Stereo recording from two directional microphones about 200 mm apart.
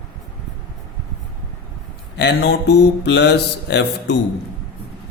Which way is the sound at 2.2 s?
60° left (ahead or behind).